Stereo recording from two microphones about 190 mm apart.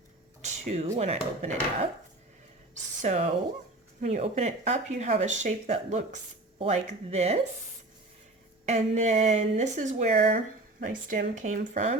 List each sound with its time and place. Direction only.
0.4 s speech: 35° right (ahead or behind)
3.0 s speech: 40° right (ahead or behind)
8.6 s speech: 35° right (ahead or behind)